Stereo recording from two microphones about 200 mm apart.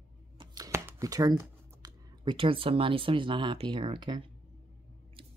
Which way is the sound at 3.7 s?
25° right (ahead or behind).